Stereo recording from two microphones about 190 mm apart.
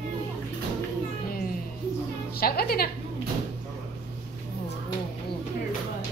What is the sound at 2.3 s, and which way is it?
Speech, 55° left (ahead or behind).